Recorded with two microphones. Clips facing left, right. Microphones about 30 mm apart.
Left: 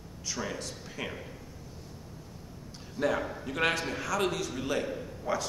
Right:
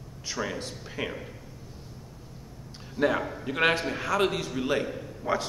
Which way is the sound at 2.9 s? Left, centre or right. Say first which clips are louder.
Right 4 dB; centre.